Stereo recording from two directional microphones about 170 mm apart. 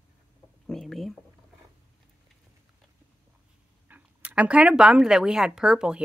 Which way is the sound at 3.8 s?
10° right (ahead or behind).